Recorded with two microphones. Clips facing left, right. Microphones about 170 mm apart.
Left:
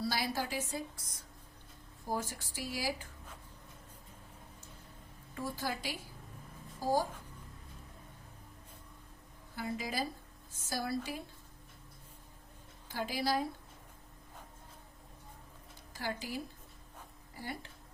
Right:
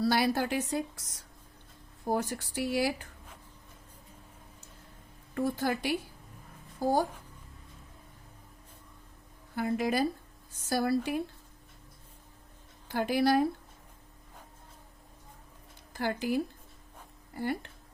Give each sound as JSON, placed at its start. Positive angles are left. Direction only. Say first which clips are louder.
{"t": 0.0, "sound": "a woman's voice", "louder": "right 8 dB", "side_deg": -65}
{"t": 2.0, "sound": "a woman's voice", "louder": "right 7 dB", "side_deg": -60}
{"t": 5.3, "sound": "a woman's voice", "louder": "right 8 dB", "side_deg": -60}
{"t": 9.6, "sound": "a woman's voice", "louder": "right 9 dB", "side_deg": -60}
{"t": 12.9, "sound": "a woman's voice", "louder": "right 8 dB", "side_deg": -60}
{"t": 15.9, "sound": "a woman's voice", "louder": "right 9 dB", "side_deg": -60}